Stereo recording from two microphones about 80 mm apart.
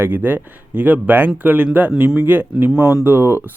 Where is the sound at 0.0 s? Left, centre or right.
Right.